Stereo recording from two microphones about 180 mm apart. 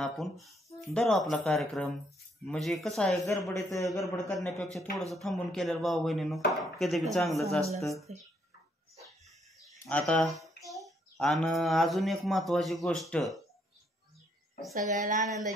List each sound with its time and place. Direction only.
0.0 s chopping: centre (ahead or behind)
3.4 s a man's voice: 15° left (ahead or behind)
4.3 s chopping: centre (ahead or behind)
9.8 s chopping: 5° left (ahead or behind)
10.6 s a child's voice: centre (ahead or behind)
14.7 s a woman's voice: 50° right (ahead or behind)